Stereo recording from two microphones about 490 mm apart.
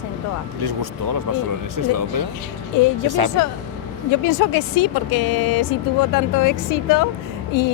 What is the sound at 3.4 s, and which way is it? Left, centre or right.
Speech, left.